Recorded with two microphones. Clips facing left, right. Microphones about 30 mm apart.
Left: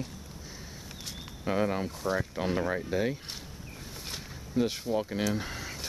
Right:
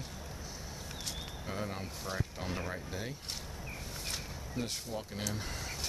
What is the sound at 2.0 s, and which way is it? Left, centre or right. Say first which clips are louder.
Speech: left 9 dB; centre.